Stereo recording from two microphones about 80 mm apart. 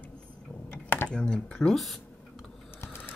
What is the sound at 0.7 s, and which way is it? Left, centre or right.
Computer keyboard, left.